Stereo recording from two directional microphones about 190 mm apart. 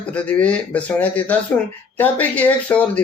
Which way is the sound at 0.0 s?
5° left (ahead or behind).